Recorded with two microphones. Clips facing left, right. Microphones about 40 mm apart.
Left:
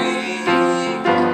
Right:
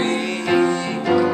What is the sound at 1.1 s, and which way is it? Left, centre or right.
Music, left.